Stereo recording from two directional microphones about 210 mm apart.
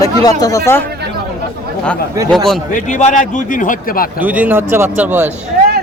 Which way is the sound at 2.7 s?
35° left (ahead or behind).